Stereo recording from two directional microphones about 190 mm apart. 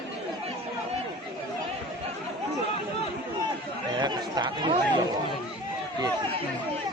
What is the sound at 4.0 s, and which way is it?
Speech, 25° right (ahead or behind).